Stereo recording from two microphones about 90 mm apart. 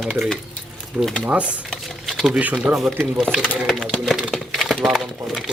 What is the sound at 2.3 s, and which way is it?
Speech, 15° right (ahead or behind).